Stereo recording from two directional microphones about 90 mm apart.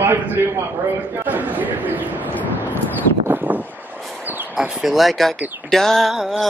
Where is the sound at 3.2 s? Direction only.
20° right (ahead or behind).